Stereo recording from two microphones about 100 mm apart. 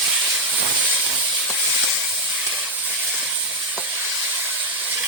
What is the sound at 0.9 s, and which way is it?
Steam, 10° right (ahead or behind).